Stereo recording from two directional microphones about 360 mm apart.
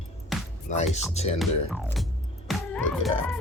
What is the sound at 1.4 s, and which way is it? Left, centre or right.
Speech, centre.